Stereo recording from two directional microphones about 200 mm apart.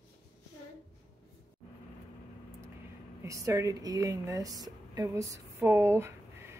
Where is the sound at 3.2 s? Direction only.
15° right (ahead or behind).